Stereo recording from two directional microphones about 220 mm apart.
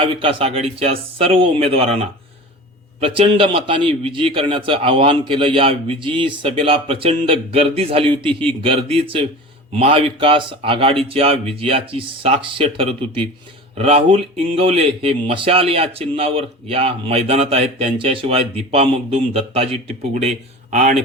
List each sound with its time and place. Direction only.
0.0 s speech: 25° right (ahead or behind)